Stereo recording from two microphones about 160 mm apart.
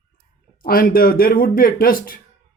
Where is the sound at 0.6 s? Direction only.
65° left (ahead or behind).